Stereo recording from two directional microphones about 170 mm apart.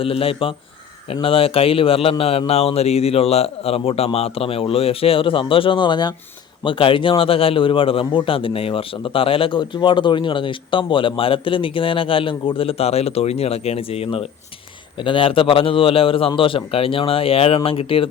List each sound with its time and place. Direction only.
0.0 s a man's voice: 35° left (ahead or behind)